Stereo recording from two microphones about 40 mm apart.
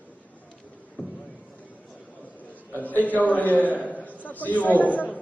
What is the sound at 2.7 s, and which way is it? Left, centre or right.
A man's voice, left.